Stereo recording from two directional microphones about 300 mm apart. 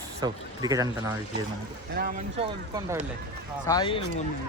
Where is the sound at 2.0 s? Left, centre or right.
Right.